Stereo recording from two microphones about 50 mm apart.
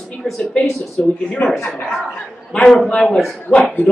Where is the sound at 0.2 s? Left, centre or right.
Centre.